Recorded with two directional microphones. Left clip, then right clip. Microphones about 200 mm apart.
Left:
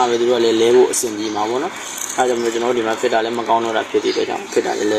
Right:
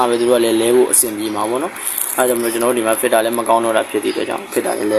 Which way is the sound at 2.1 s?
25° right (ahead or behind).